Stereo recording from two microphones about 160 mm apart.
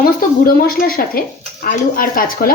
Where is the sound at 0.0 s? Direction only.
65° left (ahead or behind).